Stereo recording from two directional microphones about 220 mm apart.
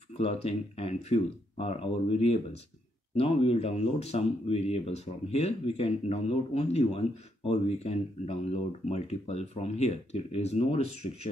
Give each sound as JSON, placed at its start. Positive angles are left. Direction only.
{"t": 0.2, "sound": "speech", "side_deg": 25}